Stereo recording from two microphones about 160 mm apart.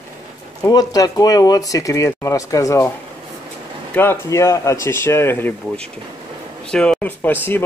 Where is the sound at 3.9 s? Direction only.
15° left (ahead or behind).